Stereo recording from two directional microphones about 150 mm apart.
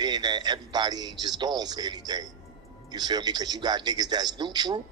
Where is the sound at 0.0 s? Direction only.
25° right (ahead or behind).